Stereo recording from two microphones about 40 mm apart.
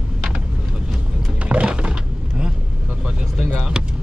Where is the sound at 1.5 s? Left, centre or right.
Right.